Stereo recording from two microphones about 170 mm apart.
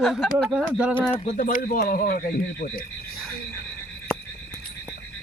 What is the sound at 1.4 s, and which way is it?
A man's voice, 55° left (ahead or behind).